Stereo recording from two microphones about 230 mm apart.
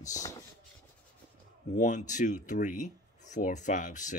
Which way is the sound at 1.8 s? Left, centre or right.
Left.